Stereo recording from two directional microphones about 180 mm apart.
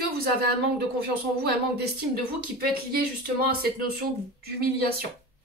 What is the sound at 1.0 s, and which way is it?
Speech, 60° right (ahead or behind).